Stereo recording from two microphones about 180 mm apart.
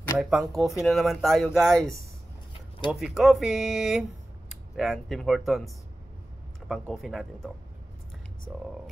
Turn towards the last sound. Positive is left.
turn(degrees=0)  # may be behind; listen again after turning